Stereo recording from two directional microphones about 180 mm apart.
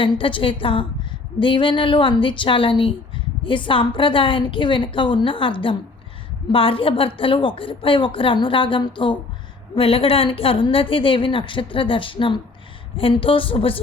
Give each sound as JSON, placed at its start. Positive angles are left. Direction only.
{"t": 0.0, "sound": "a woman's voice", "side_deg": 30}